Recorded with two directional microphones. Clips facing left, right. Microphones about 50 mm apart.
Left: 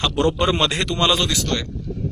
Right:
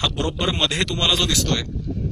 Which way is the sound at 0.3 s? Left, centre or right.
Centre.